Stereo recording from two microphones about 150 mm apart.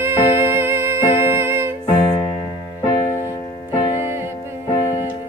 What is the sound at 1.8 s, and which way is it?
Music, 10° left (ahead or behind).